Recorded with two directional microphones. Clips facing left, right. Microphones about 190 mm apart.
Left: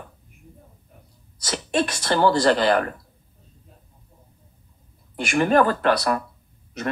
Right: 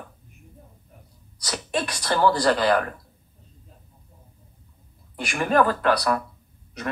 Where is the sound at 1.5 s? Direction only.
25° left (ahead or behind).